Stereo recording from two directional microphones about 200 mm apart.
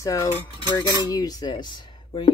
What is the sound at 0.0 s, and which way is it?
Cutlery, 15° left (ahead or behind).